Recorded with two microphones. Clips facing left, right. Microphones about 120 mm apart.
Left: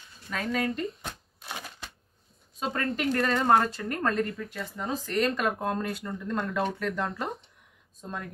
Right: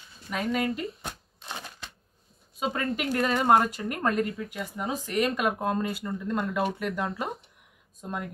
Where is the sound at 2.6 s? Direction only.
5° right (ahead or behind).